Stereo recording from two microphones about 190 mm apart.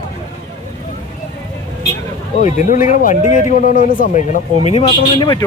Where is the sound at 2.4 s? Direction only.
40° left (ahead or behind); by 5.4 s 25° left (ahead or behind).